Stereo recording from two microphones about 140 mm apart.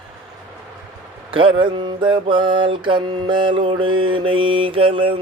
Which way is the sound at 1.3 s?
40° right (ahead or behind).